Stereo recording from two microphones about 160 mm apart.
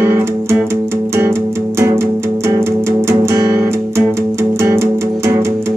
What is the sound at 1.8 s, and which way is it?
Music, 15° right (ahead or behind).